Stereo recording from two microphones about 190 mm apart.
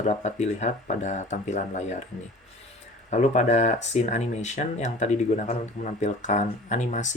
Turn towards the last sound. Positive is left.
turn(degrees=40)  # may be behind; listen again after turning